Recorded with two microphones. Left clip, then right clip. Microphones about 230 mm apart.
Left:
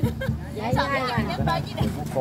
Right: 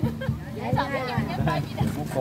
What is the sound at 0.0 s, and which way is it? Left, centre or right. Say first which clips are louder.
Hubbub: left 2 dB; left.